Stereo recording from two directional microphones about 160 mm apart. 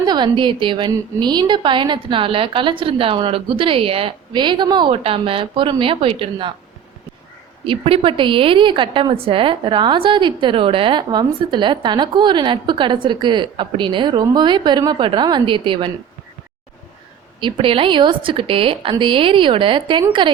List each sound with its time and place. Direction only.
0.0 s a woman's voice: 25° right (ahead or behind)
7.6 s a woman's voice: 35° right (ahead or behind)
17.4 s a woman's voice: 35° right (ahead or behind)